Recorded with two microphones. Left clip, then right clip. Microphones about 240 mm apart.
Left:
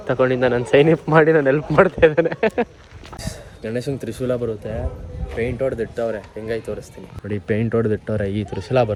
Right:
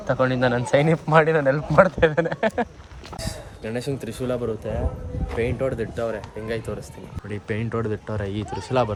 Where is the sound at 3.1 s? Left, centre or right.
Centre.